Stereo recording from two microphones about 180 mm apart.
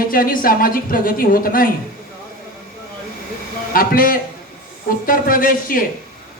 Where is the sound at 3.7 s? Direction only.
50° left (ahead or behind).